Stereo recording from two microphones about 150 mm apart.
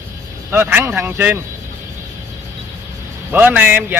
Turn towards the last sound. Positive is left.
turn(degrees=-10)  # may be behind; listen again after turning